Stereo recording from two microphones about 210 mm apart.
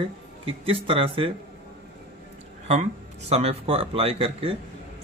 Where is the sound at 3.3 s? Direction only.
30° right (ahead or behind).